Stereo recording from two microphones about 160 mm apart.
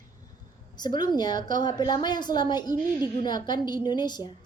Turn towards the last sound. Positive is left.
turn(degrees=25)  # may be behind; listen again after turning